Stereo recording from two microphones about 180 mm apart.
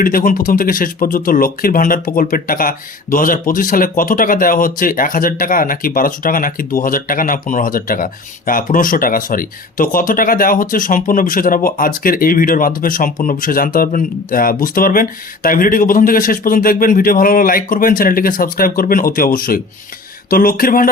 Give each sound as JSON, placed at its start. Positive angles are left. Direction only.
{"t": 0.0, "sound": "speech", "side_deg": 50}